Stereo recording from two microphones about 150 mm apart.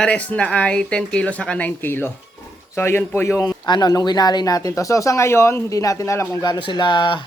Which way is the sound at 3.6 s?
30° left (ahead or behind).